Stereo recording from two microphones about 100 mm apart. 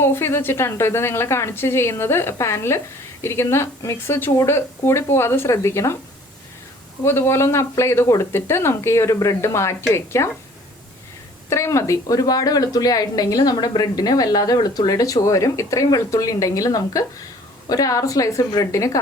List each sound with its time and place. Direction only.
0.0 s a woman's voice: 25° left (ahead or behind)
7.0 s a woman's voice: 25° left (ahead or behind)
11.4 s speech: 30° left (ahead or behind)